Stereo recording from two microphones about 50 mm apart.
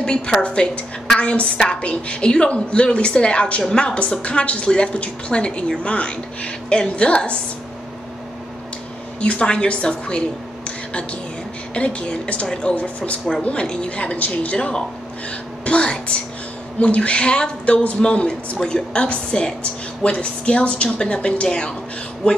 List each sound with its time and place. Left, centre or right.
0.0 s a woman's voice: centre
9.2 s a woman's voice: left